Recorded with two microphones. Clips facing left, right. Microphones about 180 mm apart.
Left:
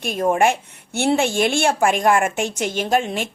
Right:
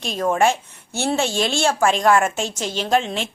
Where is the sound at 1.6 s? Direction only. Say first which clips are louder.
Right 3 dB; 15° left (ahead or behind).